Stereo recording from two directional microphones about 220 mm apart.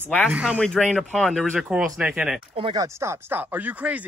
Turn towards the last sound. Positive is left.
turn(degrees=-5)  # may be behind; listen again after turning